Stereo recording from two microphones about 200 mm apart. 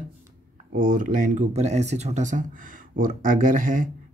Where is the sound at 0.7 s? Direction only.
45° right (ahead or behind).